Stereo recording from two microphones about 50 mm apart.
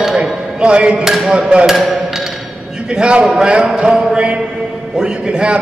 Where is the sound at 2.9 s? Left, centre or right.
Centre.